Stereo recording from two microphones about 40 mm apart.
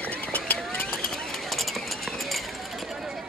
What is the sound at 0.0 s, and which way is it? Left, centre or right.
Vehicle, left.